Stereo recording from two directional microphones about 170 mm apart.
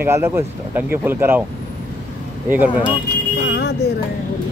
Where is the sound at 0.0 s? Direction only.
15° right (ahead or behind).